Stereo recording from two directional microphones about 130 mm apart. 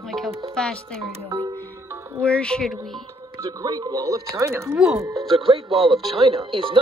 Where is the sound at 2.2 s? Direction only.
10° left (ahead or behind).